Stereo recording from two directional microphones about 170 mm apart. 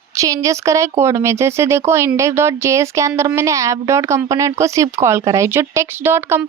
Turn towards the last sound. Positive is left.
turn(degrees=-15)  # may be behind; listen again after turning